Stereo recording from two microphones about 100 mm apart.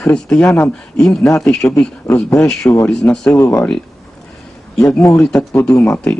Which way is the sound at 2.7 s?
20° left (ahead or behind).